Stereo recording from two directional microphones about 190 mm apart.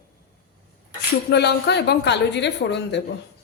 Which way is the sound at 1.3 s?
60° left (ahead or behind).